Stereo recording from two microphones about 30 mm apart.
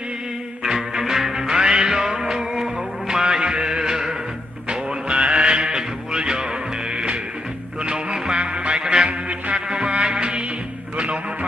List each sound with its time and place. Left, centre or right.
0.7 s music: centre
4.6 s music: right
5.6 s music: right
7.8 s music: right
8.8 s music: right
9.5 s music: right